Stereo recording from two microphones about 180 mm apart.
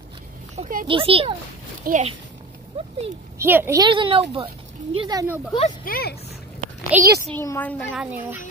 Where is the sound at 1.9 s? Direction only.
50° right (ahead or behind).